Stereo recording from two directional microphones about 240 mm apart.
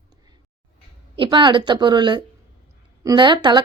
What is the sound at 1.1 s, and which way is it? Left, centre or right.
A woman's voice, centre.